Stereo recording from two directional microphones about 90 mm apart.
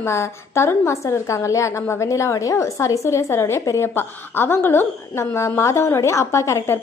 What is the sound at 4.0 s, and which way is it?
A woman's voice, 25° left (ahead or behind).